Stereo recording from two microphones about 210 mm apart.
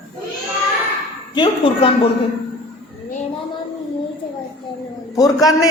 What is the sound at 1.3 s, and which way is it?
Speech, 20° left (ahead or behind).